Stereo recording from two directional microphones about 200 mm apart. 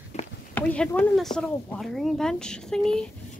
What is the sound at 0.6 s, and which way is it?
Speech, 5° left (ahead or behind).